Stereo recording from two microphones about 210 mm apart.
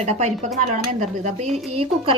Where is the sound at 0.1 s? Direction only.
35° right (ahead or behind).